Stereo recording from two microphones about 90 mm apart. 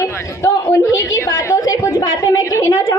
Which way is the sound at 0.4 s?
35° left (ahead or behind).